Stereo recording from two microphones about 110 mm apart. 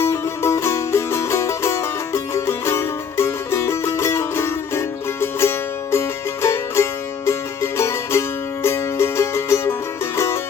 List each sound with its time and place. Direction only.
0.0 s music: 25° left (ahead or behind)